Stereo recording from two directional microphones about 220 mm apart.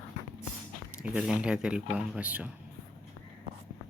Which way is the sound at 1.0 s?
5° right (ahead or behind).